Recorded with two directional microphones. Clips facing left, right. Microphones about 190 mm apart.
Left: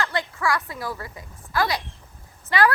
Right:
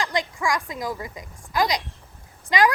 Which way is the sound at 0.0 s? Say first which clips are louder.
Even; 15° right (ahead or behind).